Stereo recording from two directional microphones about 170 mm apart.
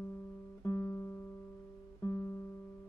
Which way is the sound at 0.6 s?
15° left (ahead or behind).